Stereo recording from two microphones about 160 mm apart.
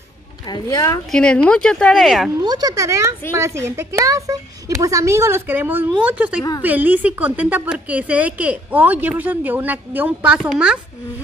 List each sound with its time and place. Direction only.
0.5 s a woman's voice: 25° left (ahead or behind)
1.1 s speech: 5° left (ahead or behind)
2.4 s a woman's voice: 25° right (ahead or behind); by 10.8 s 5° right (ahead or behind)